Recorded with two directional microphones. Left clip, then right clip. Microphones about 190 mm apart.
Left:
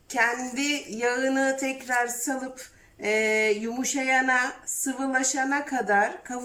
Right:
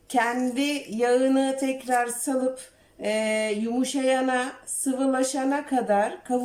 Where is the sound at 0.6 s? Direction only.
20° right (ahead or behind).